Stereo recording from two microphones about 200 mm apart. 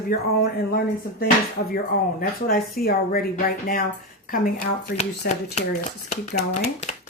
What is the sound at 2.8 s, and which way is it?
Speech, 50° left (ahead or behind).